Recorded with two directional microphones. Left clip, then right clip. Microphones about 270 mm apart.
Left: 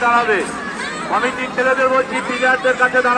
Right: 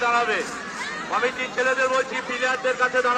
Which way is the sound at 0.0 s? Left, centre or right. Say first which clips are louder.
Left 7 dB; right.